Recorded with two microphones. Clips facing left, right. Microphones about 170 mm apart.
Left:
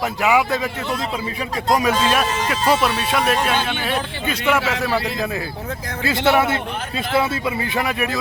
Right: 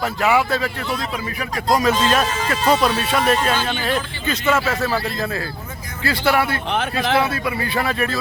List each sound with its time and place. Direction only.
0.0 s speech: 15° left (ahead or behind)
6.0 s speech: 20° left (ahead or behind)